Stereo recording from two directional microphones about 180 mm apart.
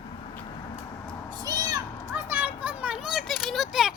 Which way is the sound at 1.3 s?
20° right (ahead or behind).